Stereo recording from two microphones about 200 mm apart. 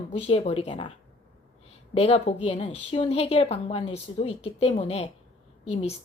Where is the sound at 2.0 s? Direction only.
30° left (ahead or behind).